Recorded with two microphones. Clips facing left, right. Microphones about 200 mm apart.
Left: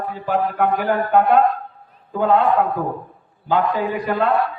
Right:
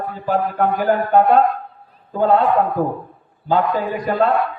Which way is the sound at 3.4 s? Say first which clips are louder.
Right 1 dB; 40° right (ahead or behind).